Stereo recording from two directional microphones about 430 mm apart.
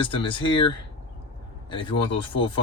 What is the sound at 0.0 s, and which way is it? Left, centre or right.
Speech, centre.